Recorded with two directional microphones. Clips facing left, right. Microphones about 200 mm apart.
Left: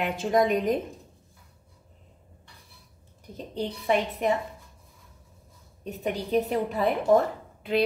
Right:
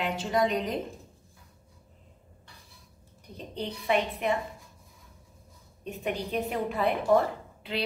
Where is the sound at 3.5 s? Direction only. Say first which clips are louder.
Left 2 dB; 40° left (ahead or behind).